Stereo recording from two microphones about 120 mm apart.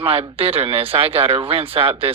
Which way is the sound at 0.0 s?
50° right (ahead or behind).